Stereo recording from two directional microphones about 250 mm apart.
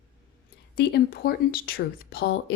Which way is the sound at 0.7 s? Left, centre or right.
Left.